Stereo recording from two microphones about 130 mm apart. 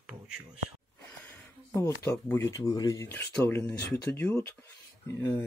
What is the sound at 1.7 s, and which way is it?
Speech, 25° left (ahead or behind).